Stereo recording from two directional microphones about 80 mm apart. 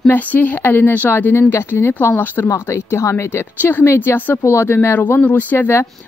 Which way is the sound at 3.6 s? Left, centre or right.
Left.